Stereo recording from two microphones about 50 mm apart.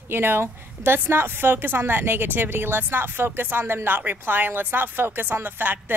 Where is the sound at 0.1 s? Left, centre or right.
Right.